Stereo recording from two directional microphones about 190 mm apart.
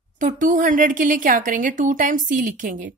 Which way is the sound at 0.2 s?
45° right (ahead or behind).